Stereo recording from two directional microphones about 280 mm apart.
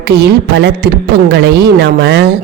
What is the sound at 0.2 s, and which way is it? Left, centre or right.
A woman's voice, right.